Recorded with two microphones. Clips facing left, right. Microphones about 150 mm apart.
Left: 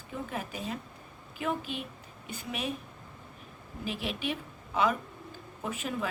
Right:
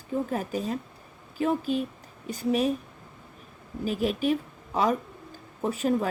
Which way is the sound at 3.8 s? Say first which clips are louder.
Right 9 dB; 40° right (ahead or behind).